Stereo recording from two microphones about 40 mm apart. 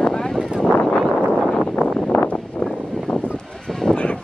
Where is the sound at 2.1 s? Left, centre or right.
Left.